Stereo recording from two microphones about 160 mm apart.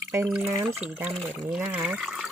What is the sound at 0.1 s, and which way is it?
A woman's voice, 15° right (ahead or behind).